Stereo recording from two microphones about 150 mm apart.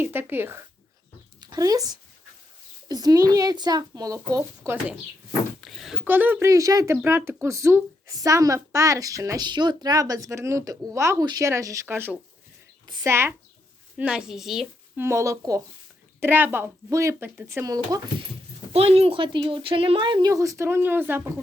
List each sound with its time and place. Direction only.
0.0 s speech: 15° right (ahead or behind)
1.4 s a woman's voice: 25° right (ahead or behind)
5.5 s a sound: centre (ahead or behind)
6.1 s a woman's voice: 10° right (ahead or behind)
14.9 s a woman's voice: 20° right (ahead or behind)
18.7 s speech: 40° right (ahead or behind); by 21.2 s 15° right (ahead or behind)